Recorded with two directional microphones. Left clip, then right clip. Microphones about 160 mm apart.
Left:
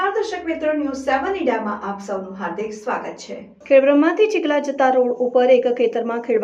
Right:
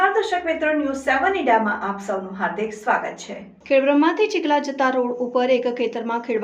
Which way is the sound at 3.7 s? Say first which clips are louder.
Left 3 dB; 5° right (ahead or behind).